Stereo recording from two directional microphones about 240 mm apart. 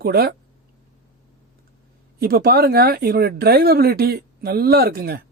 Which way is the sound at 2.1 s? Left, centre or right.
Right.